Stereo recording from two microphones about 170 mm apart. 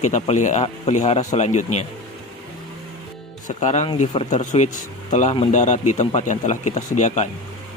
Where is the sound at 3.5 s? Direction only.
45° left (ahead or behind).